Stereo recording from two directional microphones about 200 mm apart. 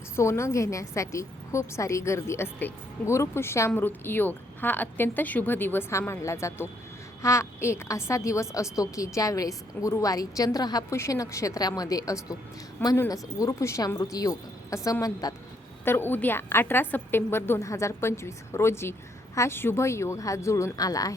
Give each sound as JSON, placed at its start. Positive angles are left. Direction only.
{"t": 0.2, "sound": "a woman's voice", "side_deg": 15}